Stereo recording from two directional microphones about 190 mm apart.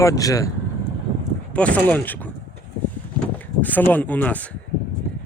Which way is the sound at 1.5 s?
5° left (ahead or behind).